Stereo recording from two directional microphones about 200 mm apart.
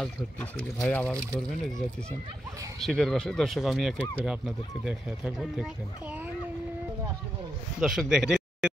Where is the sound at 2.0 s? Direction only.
15° right (ahead or behind).